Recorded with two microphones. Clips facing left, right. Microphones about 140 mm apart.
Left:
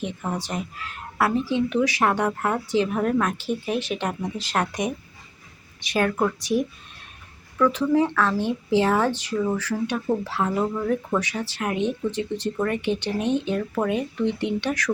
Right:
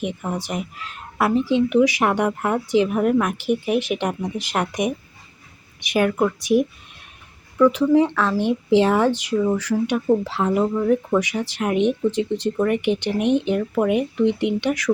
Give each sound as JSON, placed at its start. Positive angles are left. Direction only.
{"t": 0.0, "sound": "speech", "side_deg": -10}